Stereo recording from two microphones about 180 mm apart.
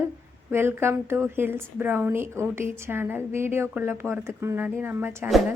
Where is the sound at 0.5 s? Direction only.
15° right (ahead or behind).